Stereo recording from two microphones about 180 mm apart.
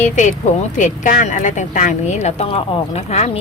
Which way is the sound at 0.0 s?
40° left (ahead or behind).